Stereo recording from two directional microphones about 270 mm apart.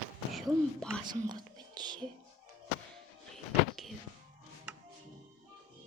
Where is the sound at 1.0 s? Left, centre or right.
Centre.